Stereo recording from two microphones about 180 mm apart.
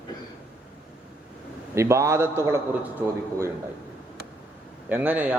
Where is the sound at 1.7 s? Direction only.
15° right (ahead or behind).